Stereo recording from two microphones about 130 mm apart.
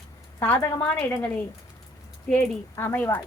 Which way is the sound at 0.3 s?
15° left (ahead or behind).